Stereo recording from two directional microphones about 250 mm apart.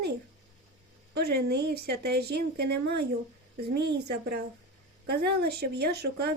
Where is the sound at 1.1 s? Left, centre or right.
Right.